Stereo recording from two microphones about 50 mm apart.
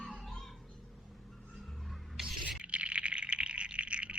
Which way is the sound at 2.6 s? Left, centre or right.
Right.